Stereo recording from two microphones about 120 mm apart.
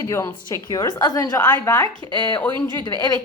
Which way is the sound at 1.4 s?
15° left (ahead or behind).